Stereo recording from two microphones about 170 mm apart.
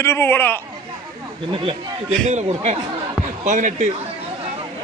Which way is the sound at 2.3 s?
45° right (ahead or behind).